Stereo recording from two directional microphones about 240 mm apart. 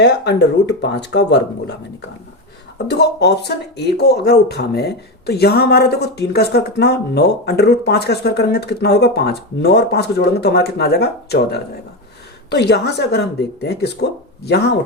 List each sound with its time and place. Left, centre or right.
0.0 s speech: left